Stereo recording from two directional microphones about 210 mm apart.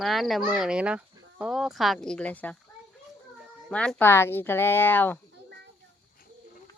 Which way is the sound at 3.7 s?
5° left (ahead or behind).